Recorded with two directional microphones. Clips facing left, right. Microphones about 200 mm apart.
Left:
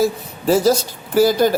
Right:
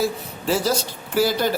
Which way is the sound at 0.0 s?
45° left (ahead or behind).